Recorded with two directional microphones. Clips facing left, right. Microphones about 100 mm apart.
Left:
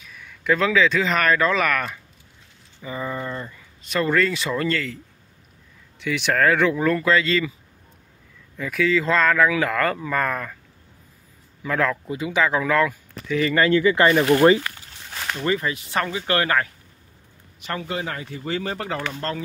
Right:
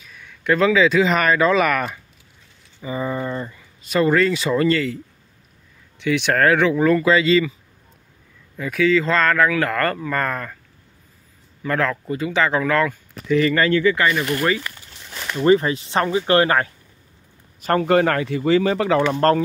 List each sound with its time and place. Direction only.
0.0 s speech: centre (ahead or behind)
5.9 s speech: 5° left (ahead or behind)
8.5 s speech: centre (ahead or behind)
11.6 s speech: 5° left (ahead or behind)
13.5 s speech: 15° left (ahead or behind)
14.0 s speech: 30° left (ahead or behind)
15.4 s speech: 30° right (ahead or behind)
17.6 s a man's voice: 40° right (ahead or behind)
17.8 s speech: 65° right (ahead or behind); by 19.2 s 90° right